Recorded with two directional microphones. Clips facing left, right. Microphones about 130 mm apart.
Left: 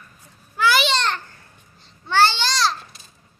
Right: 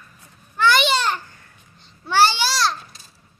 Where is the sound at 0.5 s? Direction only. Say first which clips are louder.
Right 1 dB; 5° left (ahead or behind).